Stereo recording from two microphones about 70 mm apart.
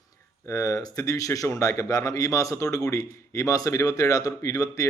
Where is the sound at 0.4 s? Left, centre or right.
Left.